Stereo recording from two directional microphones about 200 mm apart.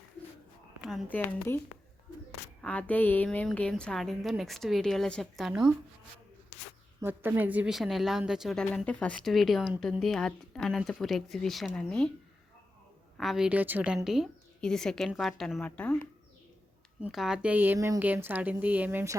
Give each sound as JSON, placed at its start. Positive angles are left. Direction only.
{"t": 0.9, "sound": "a woman's voice", "side_deg": 0}
{"t": 1.5, "sound": "a woman's voice", "side_deg": 10}
{"t": 7.0, "sound": "a woman's voice", "side_deg": -10}
{"t": 13.1, "sound": "a woman's voice", "side_deg": 0}
{"t": 17.0, "sound": "a woman's voice", "side_deg": 0}